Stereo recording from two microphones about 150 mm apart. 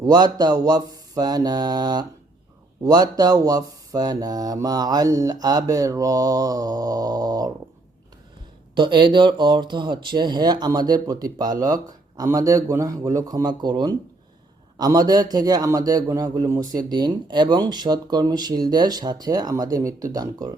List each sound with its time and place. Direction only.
0.0 s a man's voice: 25° right (ahead or behind)
8.7 s a man's voice: 30° right (ahead or behind)